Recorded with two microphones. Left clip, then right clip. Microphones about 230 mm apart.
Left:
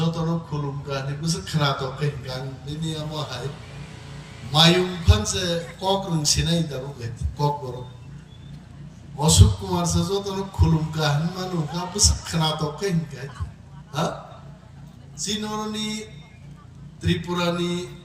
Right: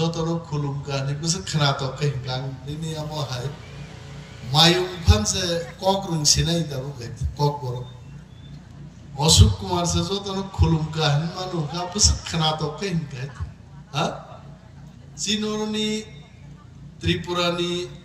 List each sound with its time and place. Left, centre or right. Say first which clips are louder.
0.0 s a man's voice: right 2 dB; right
4.5 s a man's voice: even; right
9.1 s speech: right 3 dB; centre
15.2 s speech: right 3 dB; centre